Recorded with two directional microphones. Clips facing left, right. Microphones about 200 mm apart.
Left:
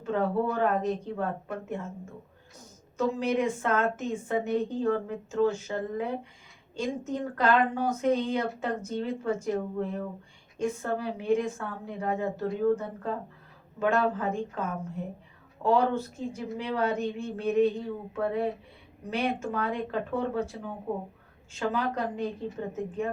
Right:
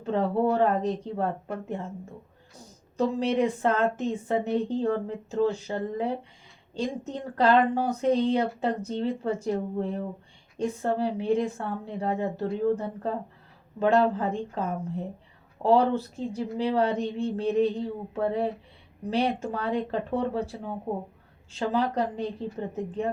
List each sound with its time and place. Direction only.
0.0 s a woman's voice: 30° right (ahead or behind)
10.6 s a woman's voice: 30° right (ahead or behind)
21.5 s a woman's voice: 30° right (ahead or behind)